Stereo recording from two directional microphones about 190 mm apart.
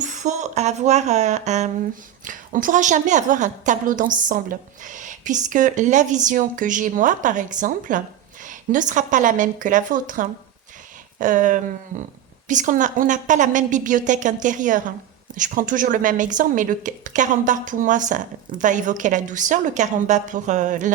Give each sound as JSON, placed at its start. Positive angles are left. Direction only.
{"t": 0.0, "sound": "a woman's voice", "side_deg": -40}